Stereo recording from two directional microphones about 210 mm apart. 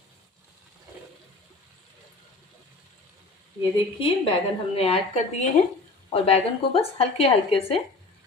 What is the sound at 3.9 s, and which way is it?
A woman's voice, 25° left (ahead or behind).